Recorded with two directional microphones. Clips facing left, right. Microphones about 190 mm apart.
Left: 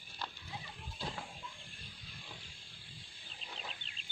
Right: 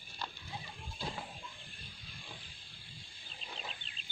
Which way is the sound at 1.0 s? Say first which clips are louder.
Right 1 dB; 5° right (ahead or behind).